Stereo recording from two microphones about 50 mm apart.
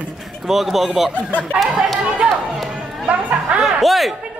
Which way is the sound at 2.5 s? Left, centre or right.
Centre.